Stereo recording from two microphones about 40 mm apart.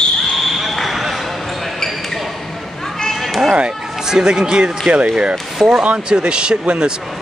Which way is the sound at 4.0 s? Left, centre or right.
Centre.